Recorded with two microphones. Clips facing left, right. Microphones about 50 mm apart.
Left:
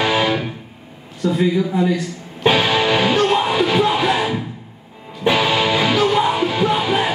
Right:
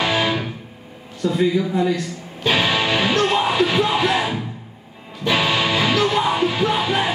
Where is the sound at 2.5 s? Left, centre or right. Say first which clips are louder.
Left 1 dB; centre.